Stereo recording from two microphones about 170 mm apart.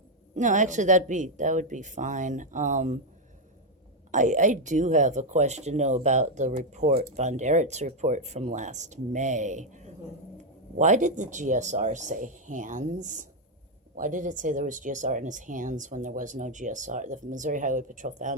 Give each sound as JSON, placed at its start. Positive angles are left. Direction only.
{"t": 0.3, "sound": "speech", "side_deg": -45}
{"t": 4.1, "sound": "speech", "side_deg": -45}